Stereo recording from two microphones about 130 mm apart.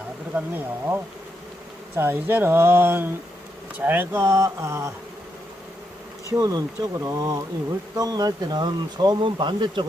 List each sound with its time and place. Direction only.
0.3 s speech: 15° right (ahead or behind)
2.0 s speech: 20° right (ahead or behind)
6.5 s speech: 25° right (ahead or behind)